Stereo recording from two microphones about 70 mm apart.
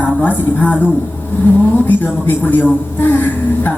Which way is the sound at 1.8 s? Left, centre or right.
Left.